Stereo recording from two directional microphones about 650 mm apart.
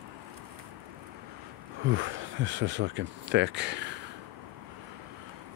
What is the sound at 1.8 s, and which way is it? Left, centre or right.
Speech, centre.